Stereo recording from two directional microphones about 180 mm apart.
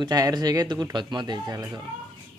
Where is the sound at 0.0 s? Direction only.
20° right (ahead or behind).